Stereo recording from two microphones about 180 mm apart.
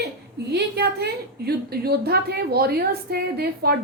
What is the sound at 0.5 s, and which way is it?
A woman's voice, 65° right (ahead or behind).